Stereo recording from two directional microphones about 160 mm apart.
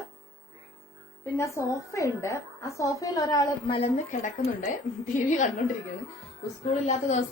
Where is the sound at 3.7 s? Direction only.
40° left (ahead or behind).